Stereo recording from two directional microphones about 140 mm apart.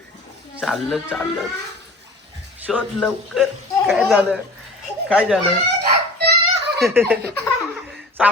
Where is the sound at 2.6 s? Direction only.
10° right (ahead or behind).